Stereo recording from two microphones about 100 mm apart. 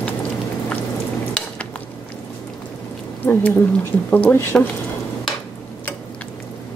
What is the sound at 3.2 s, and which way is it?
Speech, 15° left (ahead or behind).